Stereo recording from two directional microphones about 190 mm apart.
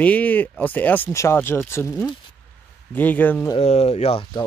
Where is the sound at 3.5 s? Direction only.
35° left (ahead or behind).